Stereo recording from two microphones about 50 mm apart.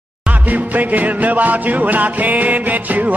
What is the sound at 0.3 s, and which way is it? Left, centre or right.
Music, right.